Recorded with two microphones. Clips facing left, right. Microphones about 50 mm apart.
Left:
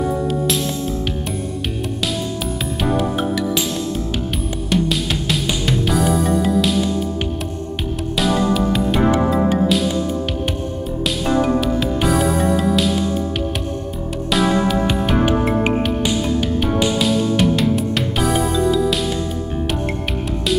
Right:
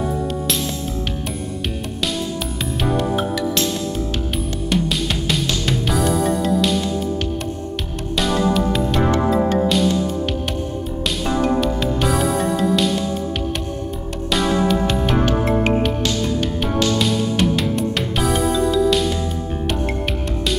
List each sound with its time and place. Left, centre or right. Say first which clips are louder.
0.0 s music: left 3 dB; centre
2.8 s music: left 1 dB; centre
5.3 s music: left 2 dB; centre
8.2 s music: left 1 dB; centre
8.9 s music: left 1 dB; centre
11.2 s music: left 1 dB; centre
14.3 s music: left 1 dB; centre
17.0 s music: left 2 dB; centre